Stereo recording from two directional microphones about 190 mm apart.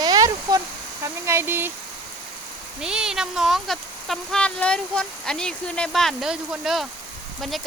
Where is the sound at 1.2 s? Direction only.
15° right (ahead or behind).